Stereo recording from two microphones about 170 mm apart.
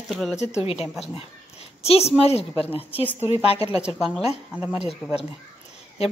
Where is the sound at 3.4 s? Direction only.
35° left (ahead or behind).